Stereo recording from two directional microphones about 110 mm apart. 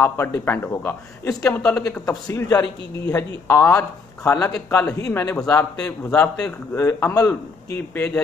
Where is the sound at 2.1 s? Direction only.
30° left (ahead or behind).